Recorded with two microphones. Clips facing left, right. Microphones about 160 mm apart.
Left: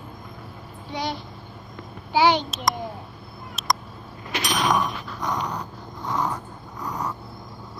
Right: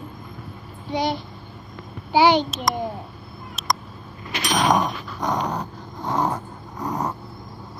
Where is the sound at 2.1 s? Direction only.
20° right (ahead or behind).